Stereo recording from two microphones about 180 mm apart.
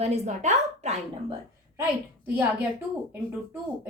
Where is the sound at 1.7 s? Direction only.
10° right (ahead or behind).